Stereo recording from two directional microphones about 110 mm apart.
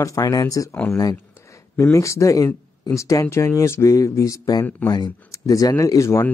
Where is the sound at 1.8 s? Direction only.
25° left (ahead or behind).